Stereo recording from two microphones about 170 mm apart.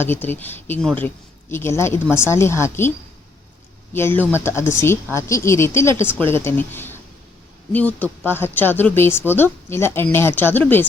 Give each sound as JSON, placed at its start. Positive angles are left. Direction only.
{"t": 0.0, "sound": "speech", "side_deg": 10}
{"t": 3.9, "sound": "speech", "side_deg": 10}